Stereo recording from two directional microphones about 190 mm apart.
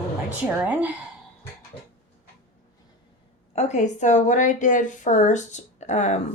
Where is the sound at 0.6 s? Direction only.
10° right (ahead or behind).